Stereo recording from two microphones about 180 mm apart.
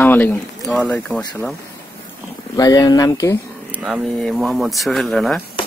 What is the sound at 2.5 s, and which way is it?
Speech, 20° left (ahead or behind).